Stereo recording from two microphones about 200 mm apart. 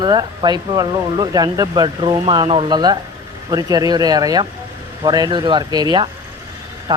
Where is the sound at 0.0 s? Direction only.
20° right (ahead or behind).